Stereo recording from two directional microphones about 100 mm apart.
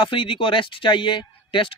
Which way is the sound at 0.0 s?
60° left (ahead or behind).